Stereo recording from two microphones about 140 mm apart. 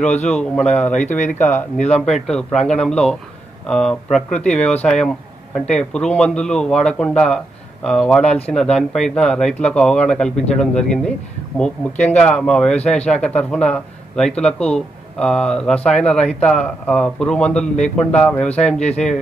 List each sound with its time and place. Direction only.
0.3 s speech: 5° left (ahead or behind)
18.7 s speech: 55° left (ahead or behind)